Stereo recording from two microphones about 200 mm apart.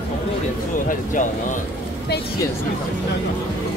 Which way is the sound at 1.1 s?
40° left (ahead or behind).